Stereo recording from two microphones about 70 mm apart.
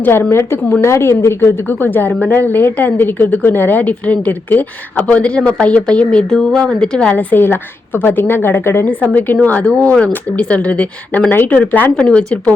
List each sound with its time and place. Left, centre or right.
0.0 s a woman's voice: left; by 7.1 s centre
7.1 s speech: left
7.4 s a woman's voice: left
8.9 s speech: left
9.6 s speech: centre